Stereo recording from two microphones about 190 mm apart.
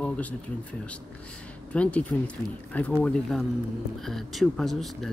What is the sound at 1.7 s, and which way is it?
Speech, 5° left (ahead or behind).